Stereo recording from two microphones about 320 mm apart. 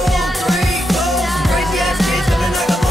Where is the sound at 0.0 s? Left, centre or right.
Centre.